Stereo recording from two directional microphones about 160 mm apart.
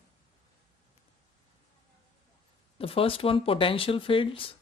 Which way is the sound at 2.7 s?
35° left (ahead or behind).